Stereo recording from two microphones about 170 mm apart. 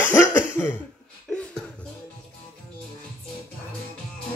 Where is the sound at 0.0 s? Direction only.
10° left (ahead or behind).